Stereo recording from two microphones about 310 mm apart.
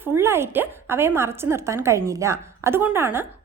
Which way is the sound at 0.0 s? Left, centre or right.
Centre.